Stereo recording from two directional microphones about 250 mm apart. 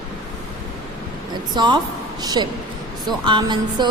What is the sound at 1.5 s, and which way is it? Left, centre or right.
A woman's voice, centre.